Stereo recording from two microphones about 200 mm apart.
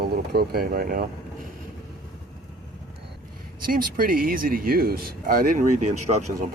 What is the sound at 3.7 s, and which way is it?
Speech, 45° right (ahead or behind).